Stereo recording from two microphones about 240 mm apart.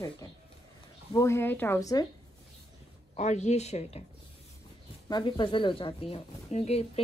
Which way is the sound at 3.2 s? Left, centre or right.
Left.